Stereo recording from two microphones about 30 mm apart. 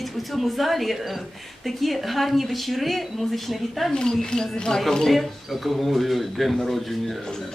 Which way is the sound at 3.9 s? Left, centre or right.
Left.